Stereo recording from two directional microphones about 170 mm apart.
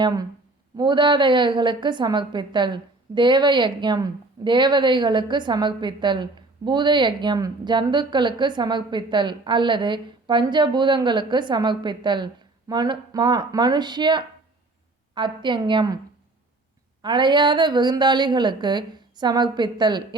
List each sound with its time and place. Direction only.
0.0 s a woman's voice: 25° right (ahead or behind)
17.0 s a woman's voice: 25° right (ahead or behind)